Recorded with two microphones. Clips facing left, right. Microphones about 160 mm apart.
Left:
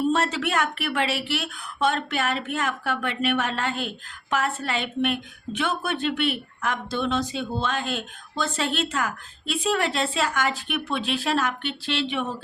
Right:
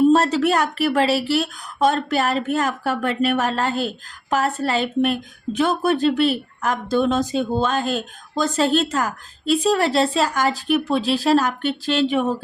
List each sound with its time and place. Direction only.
0.1 s a woman's voice: 40° right (ahead or behind)